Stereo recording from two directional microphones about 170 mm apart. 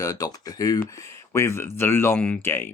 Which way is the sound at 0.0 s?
20° left (ahead or behind).